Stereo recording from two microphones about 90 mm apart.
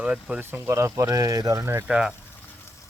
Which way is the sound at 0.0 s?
10° right (ahead or behind).